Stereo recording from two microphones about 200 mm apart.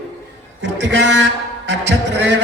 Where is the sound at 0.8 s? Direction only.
65° right (ahead or behind).